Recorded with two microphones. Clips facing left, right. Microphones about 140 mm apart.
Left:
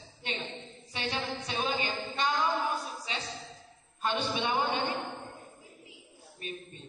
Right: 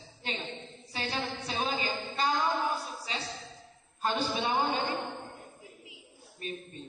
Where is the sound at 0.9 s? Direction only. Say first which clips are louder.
Even; 35° right (ahead or behind).